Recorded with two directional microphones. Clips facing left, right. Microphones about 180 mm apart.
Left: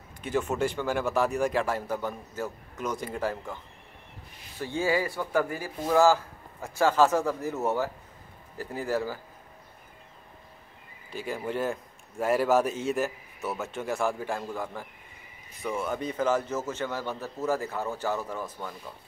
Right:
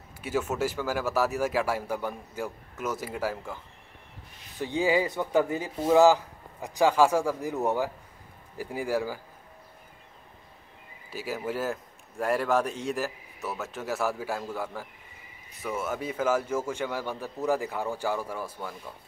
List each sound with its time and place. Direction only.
0.2 s a man's voice: 5° right (ahead or behind)
4.6 s a man's voice: 15° right (ahead or behind)
11.1 s a man's voice: 5° right (ahead or behind)